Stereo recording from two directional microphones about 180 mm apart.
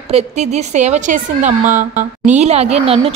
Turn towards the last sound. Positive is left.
turn(degrees=-35)  # may be behind; listen again after turning